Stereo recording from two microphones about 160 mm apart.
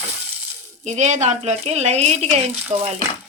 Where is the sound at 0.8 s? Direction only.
50° right (ahead or behind).